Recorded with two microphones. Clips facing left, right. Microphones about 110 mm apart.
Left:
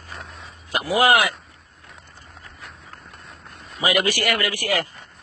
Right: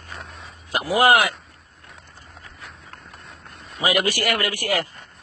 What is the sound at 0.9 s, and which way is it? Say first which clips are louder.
Speech: right 1 dB; 45° right (ahead or behind).